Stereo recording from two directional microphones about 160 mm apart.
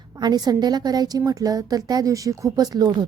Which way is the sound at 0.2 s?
25° right (ahead or behind).